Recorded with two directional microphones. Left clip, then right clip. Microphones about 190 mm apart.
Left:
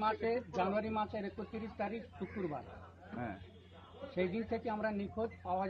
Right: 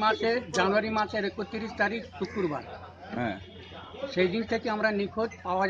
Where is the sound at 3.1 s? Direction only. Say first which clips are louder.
Right 12 dB; 70° right (ahead or behind).